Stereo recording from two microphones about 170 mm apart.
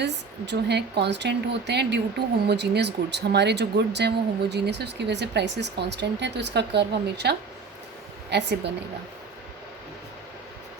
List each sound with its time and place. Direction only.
0.0 s speech: 85° right